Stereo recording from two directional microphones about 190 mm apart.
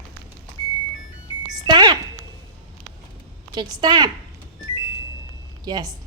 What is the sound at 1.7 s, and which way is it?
Speech, 25° right (ahead or behind).